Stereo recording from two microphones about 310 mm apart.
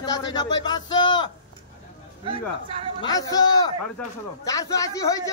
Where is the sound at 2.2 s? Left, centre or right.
Centre.